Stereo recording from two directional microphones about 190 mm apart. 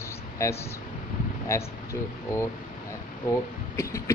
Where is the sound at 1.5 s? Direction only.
15° left (ahead or behind).